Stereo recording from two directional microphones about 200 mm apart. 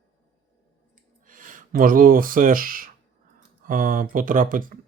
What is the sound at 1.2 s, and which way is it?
Speech, 40° right (ahead or behind).